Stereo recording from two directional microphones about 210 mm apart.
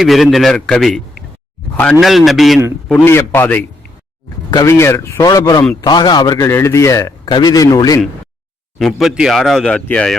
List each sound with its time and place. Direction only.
0.0 s speech: centre (ahead or behind)
2.9 s a man's voice: 10° left (ahead or behind)
8.8 s speech: centre (ahead or behind)